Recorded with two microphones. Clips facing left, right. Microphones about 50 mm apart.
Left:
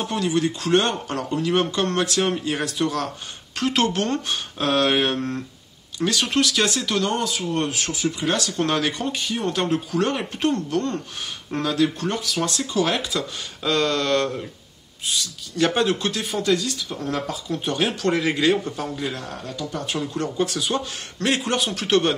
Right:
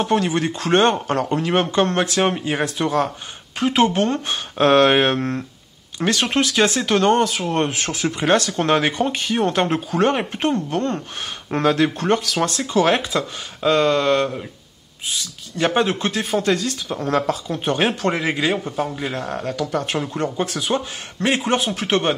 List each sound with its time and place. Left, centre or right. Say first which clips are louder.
0.0 s speech: right 3 dB; right
3.5 s a man's voice: right 4 dB; centre
4.3 s speech: right 7 dB; right
12.2 s speech: right 4 dB; right
12.7 s speech: right 6 dB; right
13.6 s a man's voice: right 5 dB; right
15.5 s speech: right 1 dB; right
17.0 s speech: right 7 dB; right
17.5 s speech: right 3 dB; right
18.1 s a man's voice: left 1 dB; centre
19.1 s speech: right 7 dB; right
20.2 s a man's voice: right 1 dB; right